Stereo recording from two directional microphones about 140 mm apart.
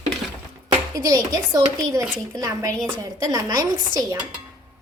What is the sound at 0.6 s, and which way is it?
A child's voice, 25° right (ahead or behind).